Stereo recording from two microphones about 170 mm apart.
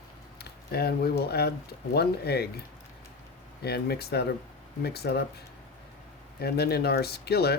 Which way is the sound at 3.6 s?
70° left (ahead or behind).